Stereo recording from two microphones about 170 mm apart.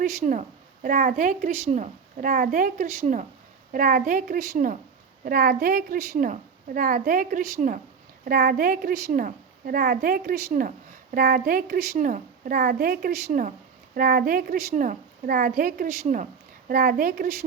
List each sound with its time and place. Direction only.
0.0 s a woman's voice: 55° right (ahead or behind)